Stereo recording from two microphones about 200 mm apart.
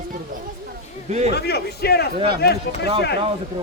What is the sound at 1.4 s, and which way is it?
A man's voice, 55° left (ahead or behind).